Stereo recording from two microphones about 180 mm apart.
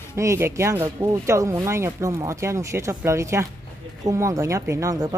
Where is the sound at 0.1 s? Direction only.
15° right (ahead or behind).